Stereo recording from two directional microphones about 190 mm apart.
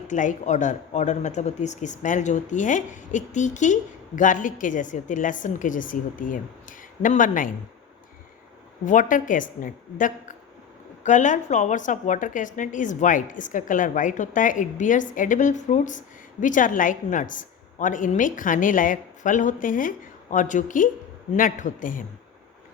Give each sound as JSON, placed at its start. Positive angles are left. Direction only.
{"t": 0.1, "sound": "speech", "side_deg": 40}
{"t": 8.8, "sound": "a woman's voice", "side_deg": 45}